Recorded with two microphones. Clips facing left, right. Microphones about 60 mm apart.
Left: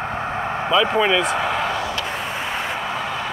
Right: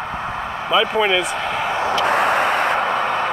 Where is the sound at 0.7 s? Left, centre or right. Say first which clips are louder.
Right 1 dB; centre.